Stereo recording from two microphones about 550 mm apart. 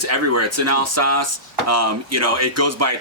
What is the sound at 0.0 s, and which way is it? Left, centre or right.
A man's voice, right.